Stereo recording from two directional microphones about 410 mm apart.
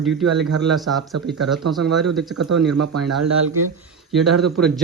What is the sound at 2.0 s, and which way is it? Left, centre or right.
Speech, centre.